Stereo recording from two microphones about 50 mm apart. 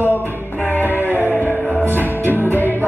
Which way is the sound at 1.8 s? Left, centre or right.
Right.